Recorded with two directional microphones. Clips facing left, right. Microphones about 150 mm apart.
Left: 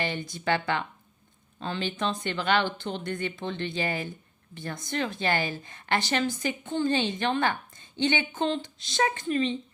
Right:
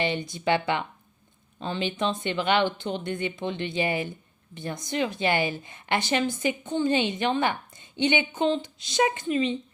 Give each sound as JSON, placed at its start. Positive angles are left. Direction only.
{"t": 0.0, "sound": "a woman's voice", "side_deg": -20}